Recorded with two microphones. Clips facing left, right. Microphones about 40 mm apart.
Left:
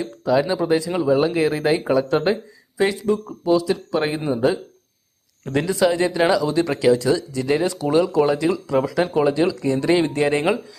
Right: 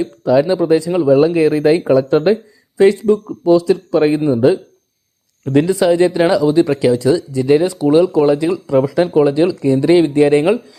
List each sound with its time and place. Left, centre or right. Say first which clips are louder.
0.0 s speech: right 6 dB; centre
3.4 s speech: right 6 dB; centre
3.7 s speech: right 8 dB; centre
5.5 s speech: right 6 dB; centre